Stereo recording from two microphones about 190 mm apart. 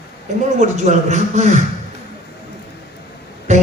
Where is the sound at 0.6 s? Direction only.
35° right (ahead or behind).